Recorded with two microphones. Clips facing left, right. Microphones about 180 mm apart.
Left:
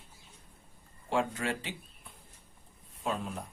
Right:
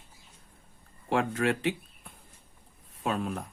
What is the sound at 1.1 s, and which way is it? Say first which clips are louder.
Speech: right 4 dB; 65° right (ahead or behind).